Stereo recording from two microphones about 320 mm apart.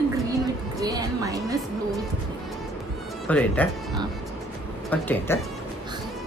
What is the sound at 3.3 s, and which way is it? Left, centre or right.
Speech, centre.